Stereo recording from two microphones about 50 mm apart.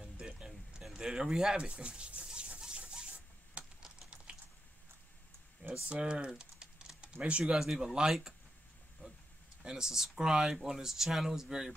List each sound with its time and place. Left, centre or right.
0.0 s a sound: centre
5.9 s speech: right
7.5 s speech: centre
9.6 s speech: centre